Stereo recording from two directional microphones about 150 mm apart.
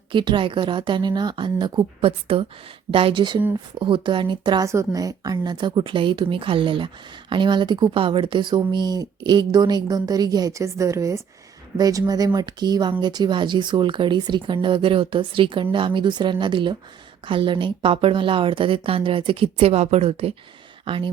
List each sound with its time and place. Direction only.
0.1 s a woman's voice: 30° right (ahead or behind)